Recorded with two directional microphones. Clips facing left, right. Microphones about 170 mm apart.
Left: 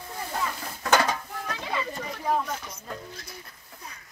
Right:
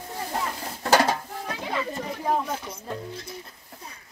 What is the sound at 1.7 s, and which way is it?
Speech, 30° right (ahead or behind).